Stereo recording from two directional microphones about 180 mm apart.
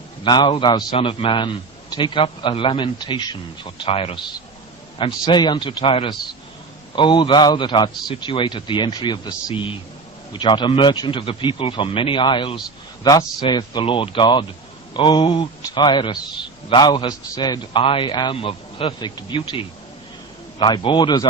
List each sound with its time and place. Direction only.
0.3 s a man's voice: 25° left (ahead or behind)